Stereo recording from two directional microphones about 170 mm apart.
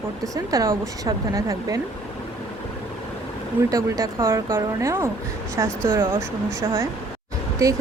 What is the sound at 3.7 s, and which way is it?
Speech, 20° right (ahead or behind).